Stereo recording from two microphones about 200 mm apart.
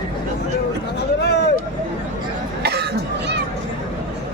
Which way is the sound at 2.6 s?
55° right (ahead or behind).